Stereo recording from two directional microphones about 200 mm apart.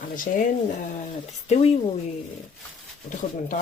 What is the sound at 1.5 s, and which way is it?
Speech, 30° left (ahead or behind).